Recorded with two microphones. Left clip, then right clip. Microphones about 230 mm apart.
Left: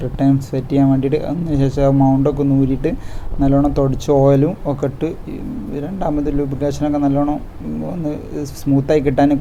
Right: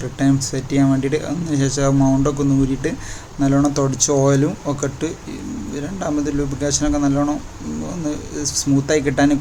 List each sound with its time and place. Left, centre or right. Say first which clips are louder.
0.0 s speech: left 2 dB; centre
1.9 s speech: left 2 dB; centre
2.2 s speech: left 2 dB; centre